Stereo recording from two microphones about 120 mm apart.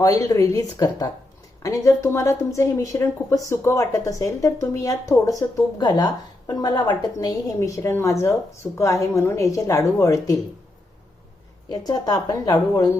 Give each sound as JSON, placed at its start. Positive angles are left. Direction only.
{"t": 0.0, "sound": "speech", "side_deg": 25}
{"t": 11.7, "sound": "a woman's voice", "side_deg": 35}